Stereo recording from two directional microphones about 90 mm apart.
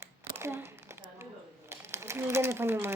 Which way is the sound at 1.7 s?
30° right (ahead or behind).